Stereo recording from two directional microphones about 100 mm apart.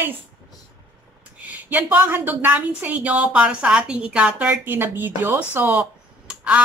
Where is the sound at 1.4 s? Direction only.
15° right (ahead or behind).